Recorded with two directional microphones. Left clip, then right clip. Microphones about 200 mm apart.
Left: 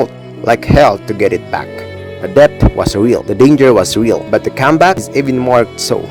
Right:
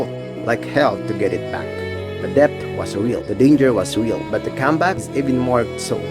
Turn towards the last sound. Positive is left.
turn(degrees=40)  # may be behind; listen again after turning